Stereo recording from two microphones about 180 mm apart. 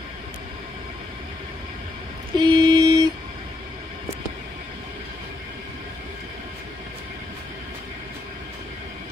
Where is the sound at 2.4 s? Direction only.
25° right (ahead or behind).